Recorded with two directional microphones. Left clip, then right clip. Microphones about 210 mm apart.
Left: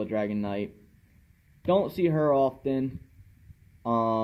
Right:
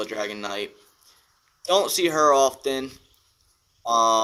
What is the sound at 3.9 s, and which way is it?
Speech, 20° right (ahead or behind).